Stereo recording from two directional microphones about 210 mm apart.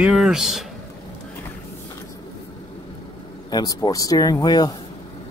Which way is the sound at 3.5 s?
20° left (ahead or behind).